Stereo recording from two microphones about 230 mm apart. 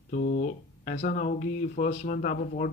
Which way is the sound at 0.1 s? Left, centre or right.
Left.